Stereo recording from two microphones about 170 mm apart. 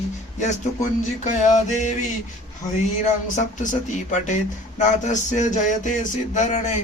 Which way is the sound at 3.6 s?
45° left (ahead or behind).